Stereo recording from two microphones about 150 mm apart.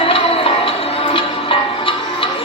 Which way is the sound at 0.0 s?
40° left (ahead or behind).